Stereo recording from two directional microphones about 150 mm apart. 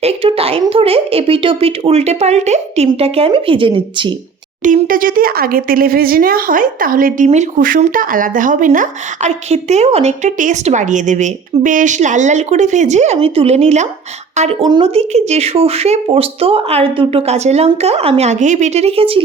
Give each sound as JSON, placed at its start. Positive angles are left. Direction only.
{"t": 0.0, "sound": "speech", "side_deg": -40}
{"t": 4.6, "sound": "speech", "side_deg": -65}
{"t": 7.3, "sound": "speech", "side_deg": -55}
{"t": 9.5, "sound": "speech", "side_deg": -45}
{"t": 13.1, "sound": "speech", "side_deg": -40}
{"t": 14.6, "sound": "speech", "side_deg": -35}